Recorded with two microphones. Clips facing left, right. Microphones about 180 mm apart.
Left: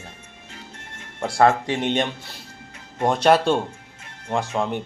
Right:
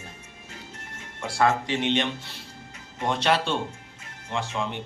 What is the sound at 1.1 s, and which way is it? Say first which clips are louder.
A man's voice: left 5 dB; 50° left (ahead or behind).